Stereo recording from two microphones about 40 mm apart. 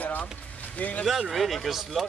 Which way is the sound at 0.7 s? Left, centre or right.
Left.